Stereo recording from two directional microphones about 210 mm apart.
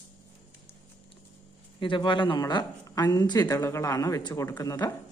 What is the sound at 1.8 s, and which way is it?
Speech, 25° left (ahead or behind).